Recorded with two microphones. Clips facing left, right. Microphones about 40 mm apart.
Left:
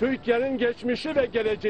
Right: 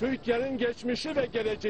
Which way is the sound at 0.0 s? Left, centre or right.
Left.